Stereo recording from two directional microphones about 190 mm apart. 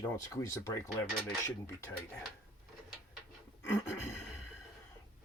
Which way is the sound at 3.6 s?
15° left (ahead or behind).